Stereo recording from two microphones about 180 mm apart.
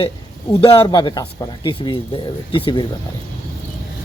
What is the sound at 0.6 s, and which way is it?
Speech, 30° left (ahead or behind).